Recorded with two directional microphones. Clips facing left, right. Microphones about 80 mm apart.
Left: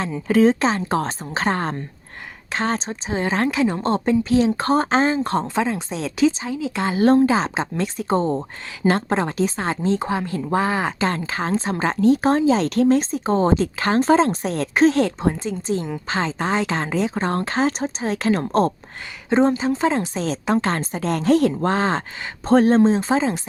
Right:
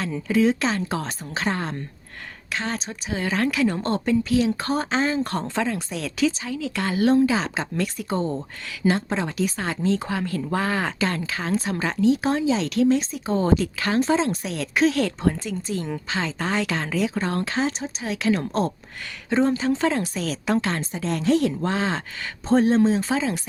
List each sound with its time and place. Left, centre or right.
0.3 s a woman's voice: left
0.6 s speech: left
5.1 s speech: left
7.0 s speech: left
8.9 s a woman's voice: left
9.4 s speech: left
11.0 s speech: left
16.0 s speech: left
16.4 s speech: left
19.3 s speech: left
22.4 s speech: left
22.7 s speech: left